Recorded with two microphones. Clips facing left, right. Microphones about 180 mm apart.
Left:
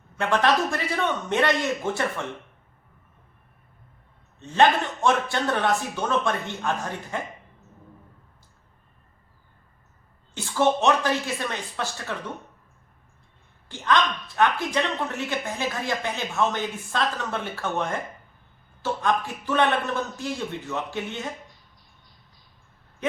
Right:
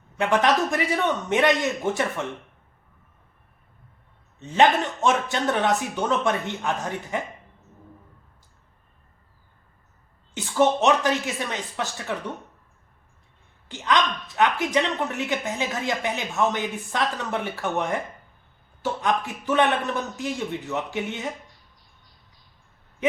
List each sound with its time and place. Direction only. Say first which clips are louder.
0.2 s a woman's voice: right 1 dB; 15° right (ahead or behind)
4.4 s a woman's voice: right 1 dB; 15° right (ahead or behind)
10.3 s a woman's voice: right 2 dB; 20° right (ahead or behind)
13.7 s a woman's voice: even; 15° right (ahead or behind)